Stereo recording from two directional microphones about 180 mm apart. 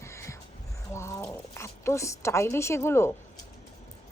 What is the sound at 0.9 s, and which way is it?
A woman's voice, 15° left (ahead or behind).